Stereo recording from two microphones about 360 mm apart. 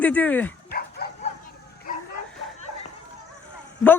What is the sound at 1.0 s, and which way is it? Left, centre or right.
Bow-wow, left.